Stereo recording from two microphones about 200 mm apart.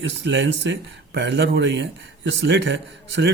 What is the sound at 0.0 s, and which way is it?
Speech, 60° right (ahead or behind).